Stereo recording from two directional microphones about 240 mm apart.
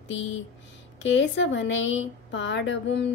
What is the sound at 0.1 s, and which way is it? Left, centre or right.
Speech, left.